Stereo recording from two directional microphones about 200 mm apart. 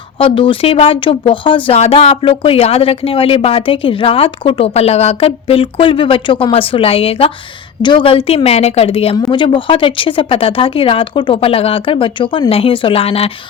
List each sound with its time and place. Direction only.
0.2 s speech: 25° left (ahead or behind)